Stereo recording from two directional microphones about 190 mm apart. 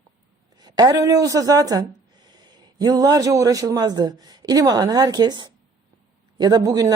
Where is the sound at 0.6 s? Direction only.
20° right (ahead or behind).